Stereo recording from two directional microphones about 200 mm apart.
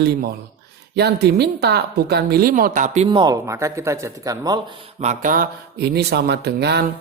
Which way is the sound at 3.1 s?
20° right (ahead or behind).